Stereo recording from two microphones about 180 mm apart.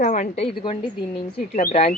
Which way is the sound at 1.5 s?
40° left (ahead or behind).